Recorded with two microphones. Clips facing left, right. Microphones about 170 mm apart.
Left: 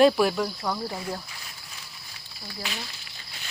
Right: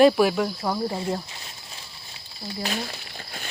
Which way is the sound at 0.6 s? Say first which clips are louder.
Right 4 dB; 25° right (ahead or behind).